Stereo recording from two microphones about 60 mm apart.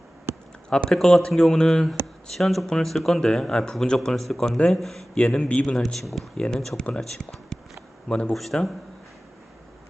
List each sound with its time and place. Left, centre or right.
0.9 s speech: centre
4.5 s speech: centre
4.8 s speech: centre
5.1 s speech: centre
6.3 s speech: centre
8.3 s speech: centre